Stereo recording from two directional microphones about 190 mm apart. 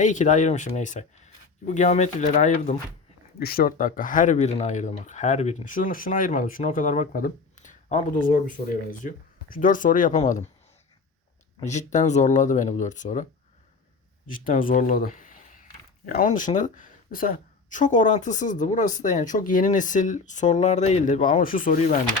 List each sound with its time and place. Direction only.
0.0 s speech: 40° left (ahead or behind)
11.6 s speech: 40° left (ahead or behind)
14.3 s speech: 45° left (ahead or behind)